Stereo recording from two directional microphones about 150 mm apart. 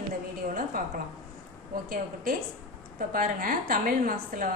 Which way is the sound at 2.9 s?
65° right (ahead or behind).